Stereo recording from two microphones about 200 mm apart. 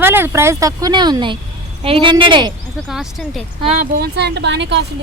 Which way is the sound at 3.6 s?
30° right (ahead or behind).